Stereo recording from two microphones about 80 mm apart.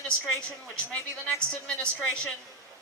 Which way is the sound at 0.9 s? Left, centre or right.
Centre.